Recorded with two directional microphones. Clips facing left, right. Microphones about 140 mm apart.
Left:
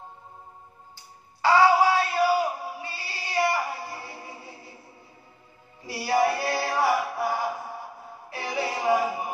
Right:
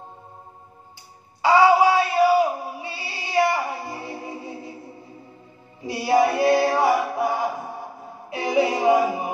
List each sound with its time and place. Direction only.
1.4 s chant: 15° right (ahead or behind)
5.9 s music: 20° right (ahead or behind)